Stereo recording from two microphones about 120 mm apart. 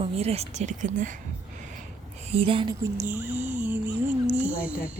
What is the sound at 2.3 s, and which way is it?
Speech, 50° right (ahead or behind).